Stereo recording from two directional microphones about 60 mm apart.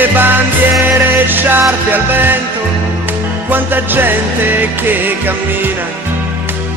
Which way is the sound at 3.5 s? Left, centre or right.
Right.